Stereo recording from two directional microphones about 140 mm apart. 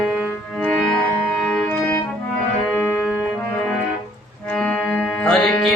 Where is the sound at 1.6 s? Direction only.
15° left (ahead or behind).